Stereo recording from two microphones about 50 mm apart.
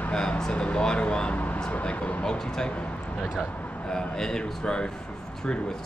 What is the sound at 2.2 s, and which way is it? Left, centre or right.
Speech, centre.